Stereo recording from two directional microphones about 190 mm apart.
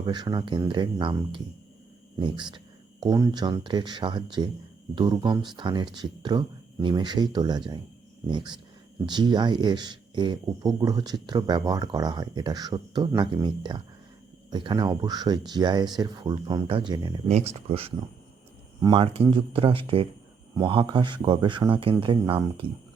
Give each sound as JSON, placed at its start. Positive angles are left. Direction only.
{"t": 0.0, "sound": "speech", "side_deg": -20}
{"t": 17.2, "sound": "speech", "side_deg": -35}